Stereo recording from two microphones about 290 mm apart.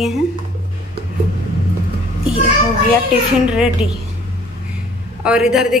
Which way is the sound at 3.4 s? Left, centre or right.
Centre.